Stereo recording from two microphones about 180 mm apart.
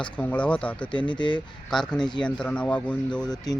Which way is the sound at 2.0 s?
25° left (ahead or behind).